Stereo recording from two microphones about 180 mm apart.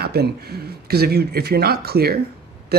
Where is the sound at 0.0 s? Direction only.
60° right (ahead or behind).